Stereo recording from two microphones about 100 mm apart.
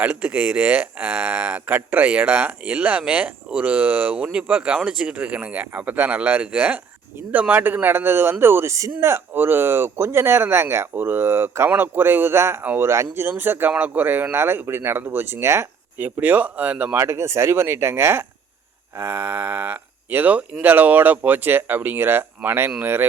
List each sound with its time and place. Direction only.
0.0 s speech: 15° right (ahead or behind)